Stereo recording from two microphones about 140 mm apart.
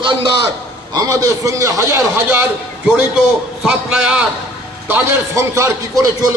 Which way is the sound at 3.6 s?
5° right (ahead or behind).